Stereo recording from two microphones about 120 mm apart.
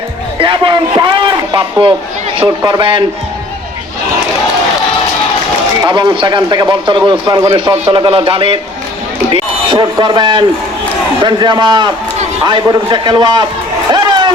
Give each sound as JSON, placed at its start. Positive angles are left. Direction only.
{"t": 0.4, "sound": "a sound", "side_deg": -45}
{"t": 2.4, "sound": "a man's voice", "side_deg": -45}
{"t": 5.8, "sound": "a man's voice", "side_deg": -35}
{"t": 9.7, "sound": "speech", "side_deg": -40}
{"t": 13.9, "sound": "run", "side_deg": -40}